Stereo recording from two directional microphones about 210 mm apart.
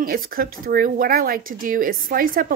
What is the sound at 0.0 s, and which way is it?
Speech, 45° right (ahead or behind).